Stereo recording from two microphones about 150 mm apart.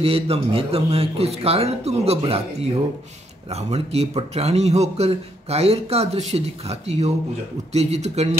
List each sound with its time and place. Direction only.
0.0 s speech: 40° right (ahead or behind)
3.4 s a man's voice: 45° right (ahead or behind)